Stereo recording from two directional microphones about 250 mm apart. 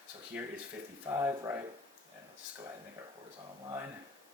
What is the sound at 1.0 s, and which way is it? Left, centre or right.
Speech, centre.